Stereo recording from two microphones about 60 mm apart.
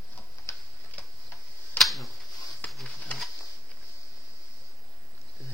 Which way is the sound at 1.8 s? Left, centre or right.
Centre.